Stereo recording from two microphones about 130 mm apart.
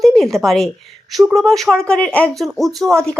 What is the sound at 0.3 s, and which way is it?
A woman's voice, centre (ahead or behind).